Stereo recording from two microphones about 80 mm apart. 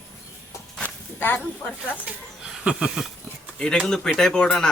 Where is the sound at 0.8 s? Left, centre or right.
Left.